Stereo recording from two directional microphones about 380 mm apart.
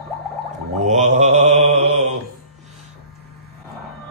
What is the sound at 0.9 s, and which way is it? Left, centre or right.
Speech, centre.